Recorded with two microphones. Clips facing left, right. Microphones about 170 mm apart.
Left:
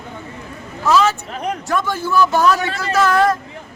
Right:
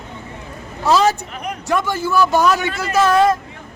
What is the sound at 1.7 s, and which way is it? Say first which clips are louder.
A man's voice: right 2 dB; 10° right (ahead or behind).